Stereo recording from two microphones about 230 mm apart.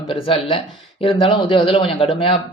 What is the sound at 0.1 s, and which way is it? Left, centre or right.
A man's voice, left.